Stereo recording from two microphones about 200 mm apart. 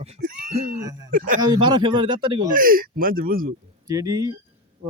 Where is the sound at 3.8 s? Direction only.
15° right (ahead or behind).